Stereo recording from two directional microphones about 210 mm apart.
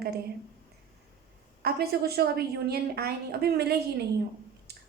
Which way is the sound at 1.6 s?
50° right (ahead or behind).